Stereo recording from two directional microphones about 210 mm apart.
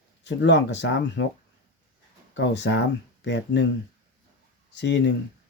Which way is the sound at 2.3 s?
60° left (ahead or behind).